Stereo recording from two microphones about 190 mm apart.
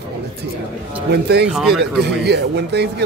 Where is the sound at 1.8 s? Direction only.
60° right (ahead or behind).